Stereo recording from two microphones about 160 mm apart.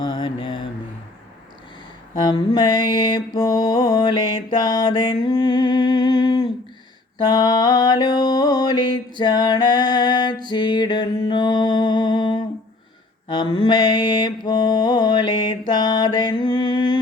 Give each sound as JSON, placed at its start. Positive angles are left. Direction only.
{"t": 0.0, "sound": "mantra", "side_deg": 30}
{"t": 2.2, "sound": "mantra", "side_deg": 25}